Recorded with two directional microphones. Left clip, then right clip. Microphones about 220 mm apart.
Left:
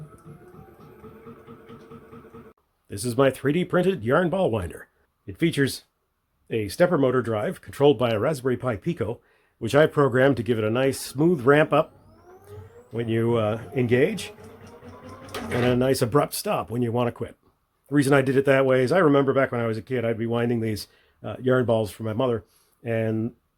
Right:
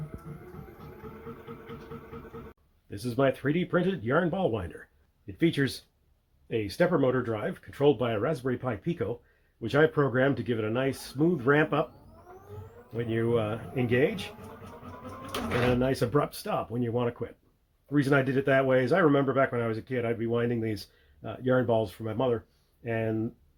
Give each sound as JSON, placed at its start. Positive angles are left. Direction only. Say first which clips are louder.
{"t": 2.9, "sound": "speech", "louder": "left 5 dB", "side_deg": 45}
{"t": 13.0, "sound": "speech", "louder": "left 4 dB", "side_deg": 45}
{"t": 15.7, "sound": "speech", "louder": "left 8 dB", "side_deg": 45}